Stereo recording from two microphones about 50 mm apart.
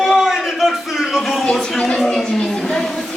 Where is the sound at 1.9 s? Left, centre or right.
Centre.